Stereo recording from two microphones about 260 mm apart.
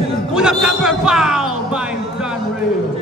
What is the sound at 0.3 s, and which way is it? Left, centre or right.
A man's voice, centre.